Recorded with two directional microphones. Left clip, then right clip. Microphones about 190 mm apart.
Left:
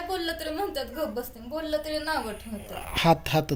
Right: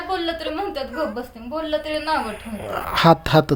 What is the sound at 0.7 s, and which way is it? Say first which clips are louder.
Speech: right 6 dB; centre (ahead or behind).